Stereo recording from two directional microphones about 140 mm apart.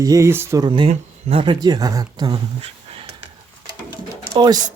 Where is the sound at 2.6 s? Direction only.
45° right (ahead or behind).